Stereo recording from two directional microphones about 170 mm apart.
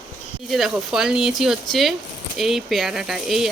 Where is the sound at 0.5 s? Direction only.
Centre (ahead or behind).